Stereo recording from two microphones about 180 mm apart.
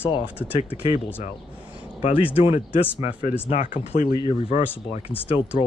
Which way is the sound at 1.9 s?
35° left (ahead or behind).